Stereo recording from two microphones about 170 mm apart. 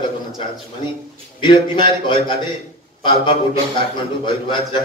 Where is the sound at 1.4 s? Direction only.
30° left (ahead or behind).